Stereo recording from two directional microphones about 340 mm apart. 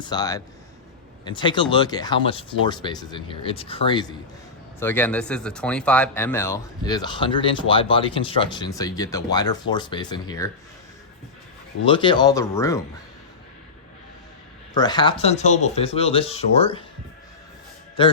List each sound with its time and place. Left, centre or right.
0.0 s speech: centre
11.9 s speech: centre
14.7 s speech: centre
18.0 s speech: centre